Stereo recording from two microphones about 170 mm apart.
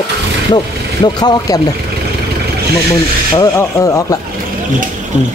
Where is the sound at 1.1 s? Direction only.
20° left (ahead or behind).